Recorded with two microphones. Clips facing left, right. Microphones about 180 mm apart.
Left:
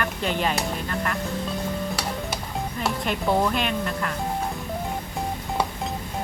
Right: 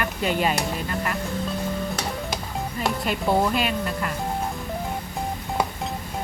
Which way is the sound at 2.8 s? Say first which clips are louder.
Right 1 dB; centre (ahead or behind).